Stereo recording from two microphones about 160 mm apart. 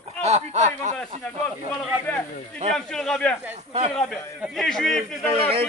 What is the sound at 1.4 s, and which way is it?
A man's voice, 10° left (ahead or behind).